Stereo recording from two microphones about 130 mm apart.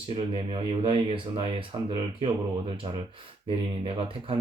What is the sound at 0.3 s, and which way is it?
Speech, 45° right (ahead or behind).